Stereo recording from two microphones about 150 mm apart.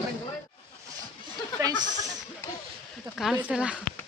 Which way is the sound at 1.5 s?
25° right (ahead or behind).